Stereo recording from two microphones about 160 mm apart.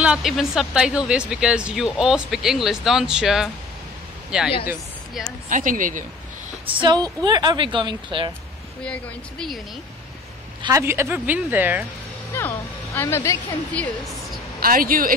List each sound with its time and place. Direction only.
0.0 s speech: 5° right (ahead or behind)
5.5 s speech: 55° right (ahead or behind)
6.6 s a woman's voice: 30° right (ahead or behind)
10.6 s speech: 20° right (ahead or behind)
12.4 s speech: 15° left (ahead or behind)
14.6 s speech: 60° right (ahead or behind)